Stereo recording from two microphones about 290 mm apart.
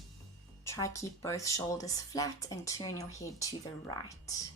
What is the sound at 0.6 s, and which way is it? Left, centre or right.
Speech, centre.